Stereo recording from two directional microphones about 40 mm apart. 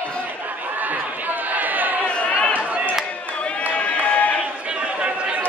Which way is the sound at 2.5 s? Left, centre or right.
Right.